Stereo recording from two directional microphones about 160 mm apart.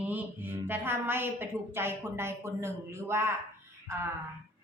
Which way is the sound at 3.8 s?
15° right (ahead or behind).